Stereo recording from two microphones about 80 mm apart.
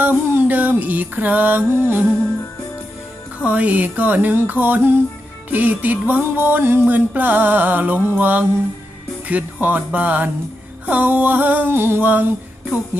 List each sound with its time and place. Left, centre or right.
0.0 s music: right
3.3 s music: centre